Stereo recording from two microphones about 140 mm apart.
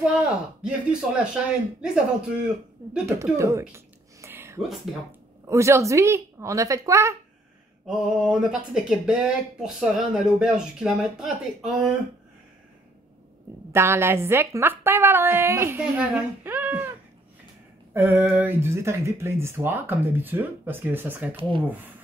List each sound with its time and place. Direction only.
0.0 s speech: 5° right (ahead or behind)
3.3 s a woman's voice: 20° right (ahead or behind)
3.7 s a sound: 20° right (ahead or behind)
5.5 s a woman's voice: 20° right (ahead or behind)
7.8 s speech: 5° right (ahead or behind)
13.7 s speech: 20° right (ahead or behind)
17.9 s speech: 15° right (ahead or behind)
21.4 s speech: 35° right (ahead or behind)